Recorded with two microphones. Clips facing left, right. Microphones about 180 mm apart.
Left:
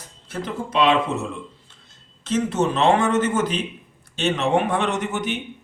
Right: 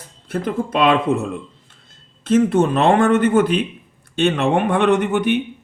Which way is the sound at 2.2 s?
55° right (ahead or behind).